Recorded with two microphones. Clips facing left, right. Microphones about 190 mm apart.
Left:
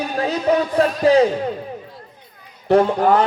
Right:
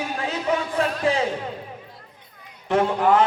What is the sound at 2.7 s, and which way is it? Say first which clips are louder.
Speech: left 4 dB; 35° left (ahead or behind).